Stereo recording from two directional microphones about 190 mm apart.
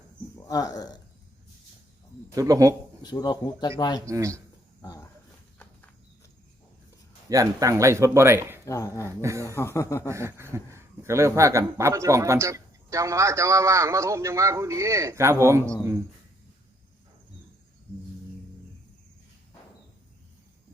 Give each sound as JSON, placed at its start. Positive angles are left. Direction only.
{"t": 0.3, "sound": "speech", "side_deg": 20}
{"t": 2.3, "sound": "a man's voice", "side_deg": -15}
{"t": 3.0, "sound": "speech", "side_deg": 20}
{"t": 4.0, "sound": "a man's voice", "side_deg": -15}
{"t": 4.8, "sound": "a sound", "side_deg": 20}
{"t": 7.3, "sound": "a man's voice", "side_deg": -15}
{"t": 8.6, "sound": "speech", "side_deg": 15}
{"t": 9.0, "sound": "a man's voice", "side_deg": -15}
{"t": 9.6, "sound": "speech", "side_deg": 15}
{"t": 10.1, "sound": "a man's voice", "side_deg": -15}